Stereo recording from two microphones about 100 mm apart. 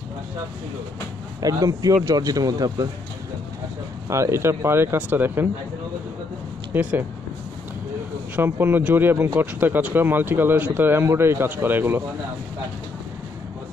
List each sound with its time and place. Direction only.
1.4 s speech: 35° right (ahead or behind)
4.1 s speech: 30° right (ahead or behind)
6.7 s speech: 15° right (ahead or behind)
8.4 s speech: 20° right (ahead or behind)